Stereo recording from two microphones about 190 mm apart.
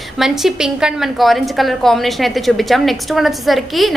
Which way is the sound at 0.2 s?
Centre (ahead or behind).